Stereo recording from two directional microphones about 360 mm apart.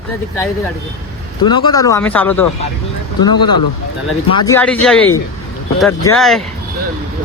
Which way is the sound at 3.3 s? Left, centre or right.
Left.